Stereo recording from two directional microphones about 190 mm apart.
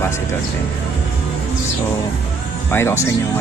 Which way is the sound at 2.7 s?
10° left (ahead or behind).